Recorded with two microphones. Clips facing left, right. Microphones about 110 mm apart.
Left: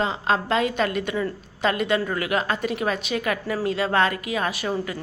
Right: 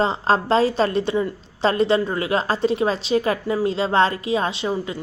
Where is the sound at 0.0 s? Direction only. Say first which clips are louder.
Right 4 dB; 35° right (ahead or behind).